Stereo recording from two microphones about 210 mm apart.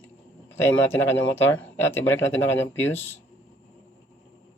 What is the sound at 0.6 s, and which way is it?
Speech, 10° left (ahead or behind).